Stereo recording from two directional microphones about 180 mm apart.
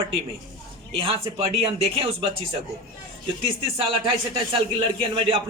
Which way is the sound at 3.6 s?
30° right (ahead or behind).